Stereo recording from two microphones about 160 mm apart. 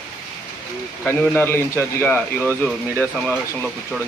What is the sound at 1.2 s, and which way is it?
Speech, 10° left (ahead or behind).